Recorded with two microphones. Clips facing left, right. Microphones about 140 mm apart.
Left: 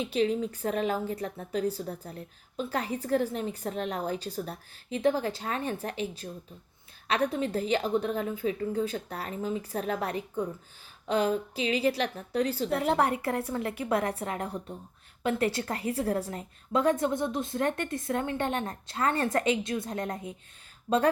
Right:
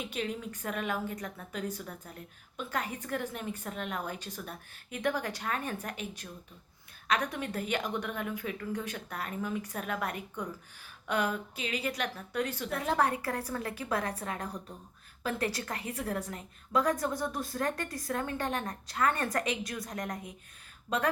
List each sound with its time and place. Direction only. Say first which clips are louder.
0.0 s a woman's voice: left 9 dB; 30° left (ahead or behind)